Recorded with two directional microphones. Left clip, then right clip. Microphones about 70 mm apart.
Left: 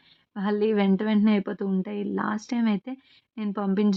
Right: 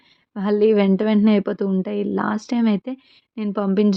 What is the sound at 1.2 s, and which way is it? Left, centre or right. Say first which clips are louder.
A woman's voice: right 7 dB; right.